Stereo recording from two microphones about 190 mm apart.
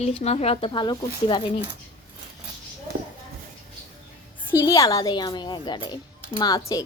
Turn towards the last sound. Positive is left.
turn(degrees=20)  # may be behind; listen again after turning